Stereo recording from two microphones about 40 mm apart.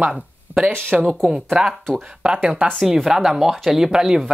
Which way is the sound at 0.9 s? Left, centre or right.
Centre.